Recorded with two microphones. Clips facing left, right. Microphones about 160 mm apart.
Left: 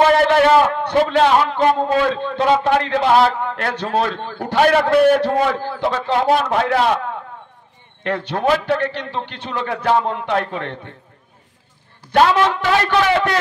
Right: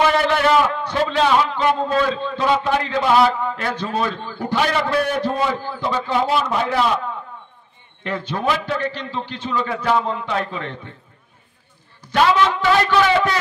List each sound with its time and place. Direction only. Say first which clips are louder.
0.2 s a sound: left 4 dB; 55° left (ahead or behind)
2.0 s a man's voice: left 3 dB; 60° left (ahead or behind)
12.1 s a man's voice: left 2 dB; 60° left (ahead or behind)